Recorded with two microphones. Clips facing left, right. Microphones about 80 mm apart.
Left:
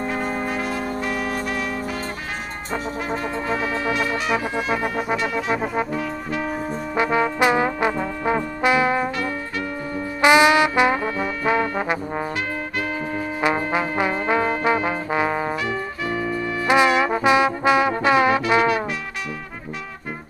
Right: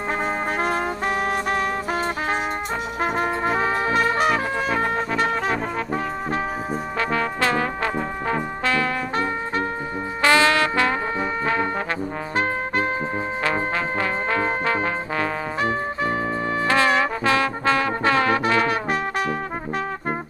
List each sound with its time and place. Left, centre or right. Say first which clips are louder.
0.2 s brass instrument: right 1 dB; right
3.0 s brass instrument: right 3 dB; right
3.4 s brass instrument: even; right
5.1 s music: even; centre
7.0 s music: left 5 dB; centre
8.6 s brass instrument: left 5 dB; centre
9.1 s music: right 3 dB; right
10.2 s music: left 3 dB; centre
13.4 s trombone: left 4 dB; centre
16.6 s trombone: left 3 dB; centre
18.5 s music: left 2 dB; centre